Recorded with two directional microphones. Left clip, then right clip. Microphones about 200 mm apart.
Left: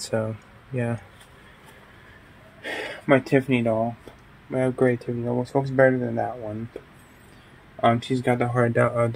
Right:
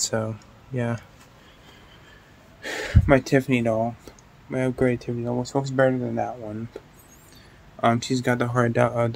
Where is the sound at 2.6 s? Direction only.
5° right (ahead or behind).